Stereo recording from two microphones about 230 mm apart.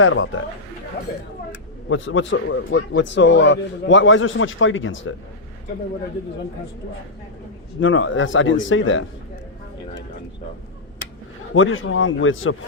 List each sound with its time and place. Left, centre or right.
0.0 s a man's voice: left
1.9 s a man's voice: left
7.8 s a man's voice: left
11.5 s a man's voice: left